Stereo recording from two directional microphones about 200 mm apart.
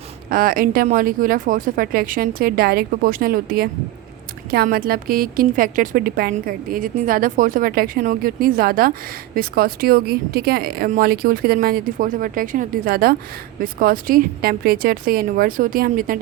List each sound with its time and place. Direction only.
0.3 s a woman's voice: 45° right (ahead or behind)